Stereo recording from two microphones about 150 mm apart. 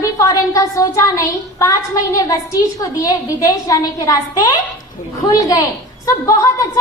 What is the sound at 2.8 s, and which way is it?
A woman's voice, 25° left (ahead or behind).